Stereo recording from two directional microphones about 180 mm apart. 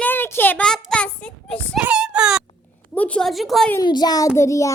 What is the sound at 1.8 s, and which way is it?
Whimper, 5° right (ahead or behind).